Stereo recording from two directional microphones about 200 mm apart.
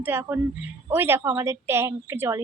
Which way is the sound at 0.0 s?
10° right (ahead or behind).